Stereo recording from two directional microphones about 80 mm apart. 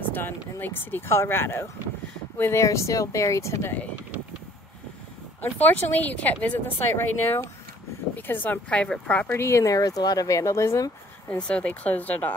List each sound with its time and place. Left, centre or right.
0.1 s speech: left
2.6 s speech: left
5.4 s speech: left
9.3 s speech: left
11.2 s speech: centre